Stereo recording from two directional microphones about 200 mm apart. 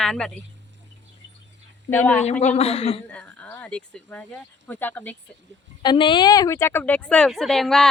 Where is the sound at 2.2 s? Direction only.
35° left (ahead or behind).